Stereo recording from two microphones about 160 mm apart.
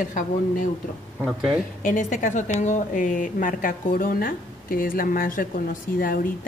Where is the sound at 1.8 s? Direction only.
55° left (ahead or behind).